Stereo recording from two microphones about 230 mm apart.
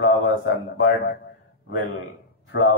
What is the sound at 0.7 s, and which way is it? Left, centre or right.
Speech, left.